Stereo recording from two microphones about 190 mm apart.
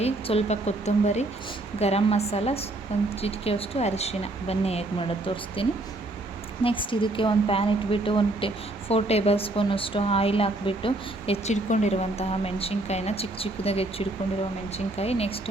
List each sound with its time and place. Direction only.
0.0 s speech: 35° left (ahead or behind)